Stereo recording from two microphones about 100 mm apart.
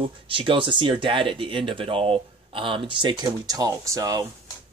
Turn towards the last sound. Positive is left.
turn(degrees=-35)  # may be behind; listen again after turning